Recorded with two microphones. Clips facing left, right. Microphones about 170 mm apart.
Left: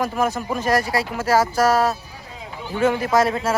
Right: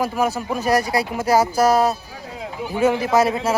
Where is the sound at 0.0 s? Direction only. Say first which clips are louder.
Right 1 dB; 5° right (ahead or behind).